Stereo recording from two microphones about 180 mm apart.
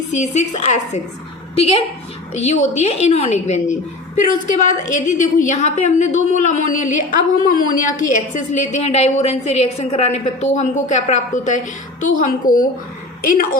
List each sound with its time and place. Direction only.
0.2 s a woman's voice: 40° left (ahead or behind)
2.3 s a woman's voice: 40° left (ahead or behind)